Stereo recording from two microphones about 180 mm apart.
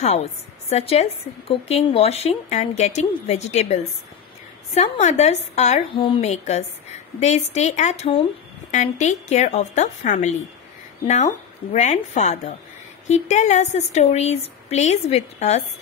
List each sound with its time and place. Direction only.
0.0 s a woman's voice: 35° left (ahead or behind)
5.9 s a woman's voice: 30° left (ahead or behind)